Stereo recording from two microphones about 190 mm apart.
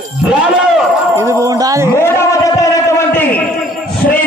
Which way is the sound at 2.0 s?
15° left (ahead or behind).